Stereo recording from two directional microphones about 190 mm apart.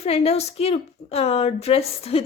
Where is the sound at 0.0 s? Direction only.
30° left (ahead or behind).